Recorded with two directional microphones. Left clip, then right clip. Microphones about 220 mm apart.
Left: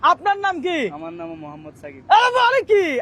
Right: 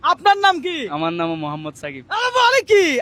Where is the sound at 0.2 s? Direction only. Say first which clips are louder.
Right 6 dB; 35° right (ahead or behind).